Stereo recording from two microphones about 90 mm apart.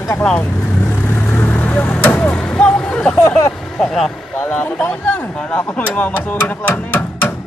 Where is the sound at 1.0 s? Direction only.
20° left (ahead or behind); by 4.1 s centre (ahead or behind).